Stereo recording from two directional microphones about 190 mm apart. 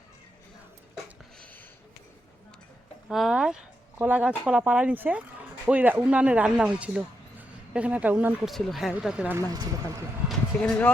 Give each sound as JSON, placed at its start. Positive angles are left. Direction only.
{"t": 3.1, "sound": "speech", "side_deg": 0}
{"t": 9.5, "sound": "speech", "side_deg": -20}
{"t": 10.2, "sound": "speech", "side_deg": 5}